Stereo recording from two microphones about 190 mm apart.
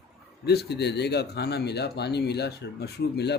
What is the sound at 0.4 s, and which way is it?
A man's voice, 60° left (ahead or behind).